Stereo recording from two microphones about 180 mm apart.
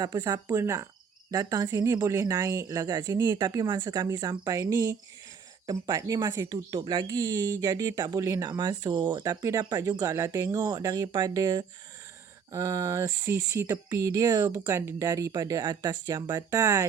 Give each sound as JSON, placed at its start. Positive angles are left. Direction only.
{"t": 0.0, "sound": "speech", "side_deg": -20}